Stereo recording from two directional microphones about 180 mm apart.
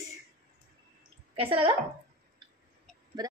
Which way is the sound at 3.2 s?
20° right (ahead or behind).